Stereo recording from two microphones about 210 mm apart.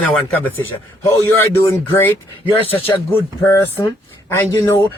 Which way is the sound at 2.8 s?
10° left (ahead or behind).